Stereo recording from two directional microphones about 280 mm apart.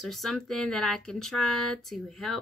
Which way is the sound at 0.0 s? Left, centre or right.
Centre.